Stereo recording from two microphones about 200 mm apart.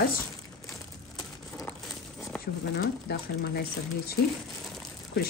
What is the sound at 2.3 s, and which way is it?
Crumpling, 5° left (ahead or behind).